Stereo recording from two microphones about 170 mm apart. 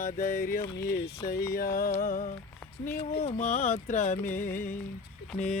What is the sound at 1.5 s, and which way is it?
Music, 60° left (ahead or behind).